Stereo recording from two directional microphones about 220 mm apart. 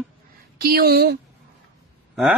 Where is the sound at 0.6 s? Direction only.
45° right (ahead or behind).